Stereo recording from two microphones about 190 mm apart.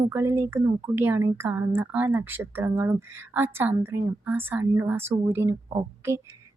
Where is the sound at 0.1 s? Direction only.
10° right (ahead or behind).